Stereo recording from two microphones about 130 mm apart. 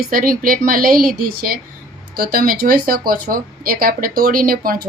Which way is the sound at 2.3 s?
90° right.